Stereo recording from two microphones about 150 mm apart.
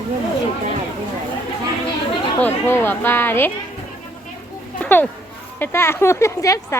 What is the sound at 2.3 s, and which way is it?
Speech, 15° left (ahead or behind).